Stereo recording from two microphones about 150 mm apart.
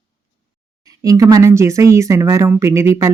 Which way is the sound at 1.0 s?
25° right (ahead or behind).